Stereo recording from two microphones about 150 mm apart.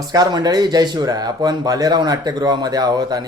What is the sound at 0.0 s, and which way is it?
Speech, 25° right (ahead or behind).